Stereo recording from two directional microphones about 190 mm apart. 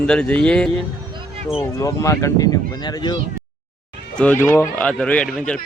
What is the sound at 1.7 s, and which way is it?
Speech, 15° left (ahead or behind).